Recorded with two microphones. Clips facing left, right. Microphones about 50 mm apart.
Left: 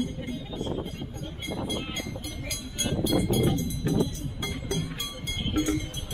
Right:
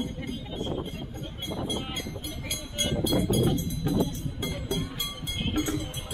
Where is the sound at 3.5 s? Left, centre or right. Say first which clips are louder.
Even; centre.